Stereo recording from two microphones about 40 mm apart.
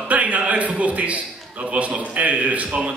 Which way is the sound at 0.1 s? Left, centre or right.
Right.